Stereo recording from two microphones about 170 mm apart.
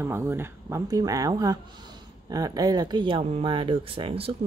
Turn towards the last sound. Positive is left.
turn(degrees=-30)  # may be behind; listen again after turning